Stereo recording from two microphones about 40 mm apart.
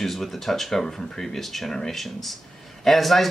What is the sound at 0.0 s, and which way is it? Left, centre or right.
Speech, centre.